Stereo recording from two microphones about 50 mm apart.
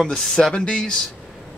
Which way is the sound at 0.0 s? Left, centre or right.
Centre.